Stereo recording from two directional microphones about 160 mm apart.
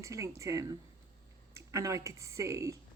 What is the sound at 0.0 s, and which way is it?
Speech, 20° right (ahead or behind).